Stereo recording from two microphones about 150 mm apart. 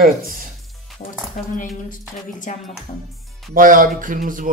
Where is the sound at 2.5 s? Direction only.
60° left (ahead or behind).